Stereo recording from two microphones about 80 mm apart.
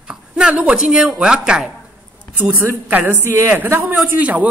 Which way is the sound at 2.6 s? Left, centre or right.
Right.